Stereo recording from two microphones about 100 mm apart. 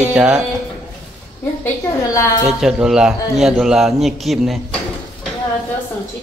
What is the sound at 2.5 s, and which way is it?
A man's voice, 5° right (ahead or behind).